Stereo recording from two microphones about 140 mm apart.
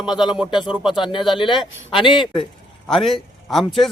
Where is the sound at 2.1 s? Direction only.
Centre (ahead or behind).